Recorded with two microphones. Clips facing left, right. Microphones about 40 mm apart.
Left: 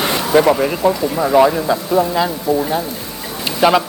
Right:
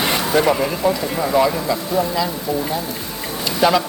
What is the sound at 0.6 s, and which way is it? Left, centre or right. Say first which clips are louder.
Speech: left 3 dB; centre.